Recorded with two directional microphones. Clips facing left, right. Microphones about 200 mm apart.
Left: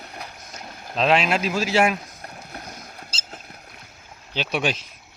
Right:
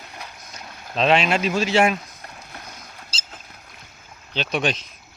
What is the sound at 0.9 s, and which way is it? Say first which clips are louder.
Speech: right 1 dB; centre (ahead or behind).